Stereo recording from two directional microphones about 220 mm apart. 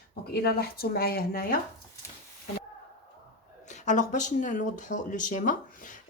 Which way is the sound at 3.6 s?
35° left (ahead or behind).